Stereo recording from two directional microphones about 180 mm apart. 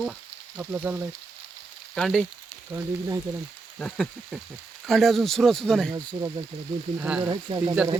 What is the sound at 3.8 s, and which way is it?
Speech, 5° left (ahead or behind).